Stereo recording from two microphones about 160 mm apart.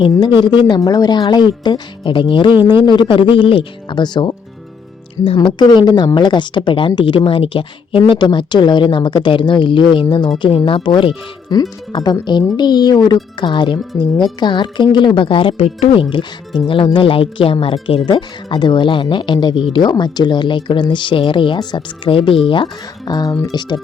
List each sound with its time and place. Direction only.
0.2 s speech: 30° left (ahead or behind)